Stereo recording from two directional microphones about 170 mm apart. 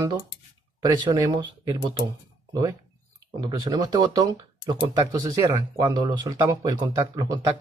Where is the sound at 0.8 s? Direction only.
20° right (ahead or behind).